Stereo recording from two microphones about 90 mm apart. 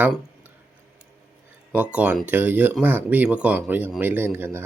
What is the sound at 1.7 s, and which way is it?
Speech, 15° right (ahead or behind).